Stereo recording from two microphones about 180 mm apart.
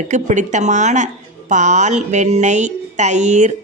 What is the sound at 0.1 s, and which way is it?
A woman's voice, 40° right (ahead or behind).